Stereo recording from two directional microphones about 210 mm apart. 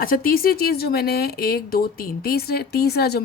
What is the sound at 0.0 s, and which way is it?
Speech, 45° left (ahead or behind).